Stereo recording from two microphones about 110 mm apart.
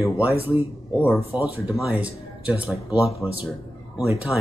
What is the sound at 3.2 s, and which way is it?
Speech, 15° left (ahead or behind).